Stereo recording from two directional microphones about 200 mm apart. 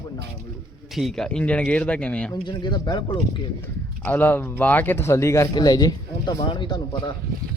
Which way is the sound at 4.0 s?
10° left (ahead or behind).